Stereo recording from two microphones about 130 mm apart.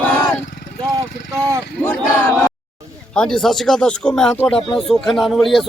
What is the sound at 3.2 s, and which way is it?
Speech, 5° left (ahead or behind).